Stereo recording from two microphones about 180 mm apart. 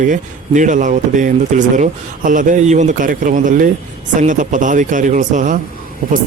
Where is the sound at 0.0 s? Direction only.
45° right (ahead or behind).